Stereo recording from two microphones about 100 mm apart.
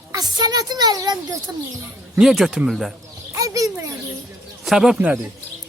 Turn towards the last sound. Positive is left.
turn(degrees=-5)  # may be behind; listen again after turning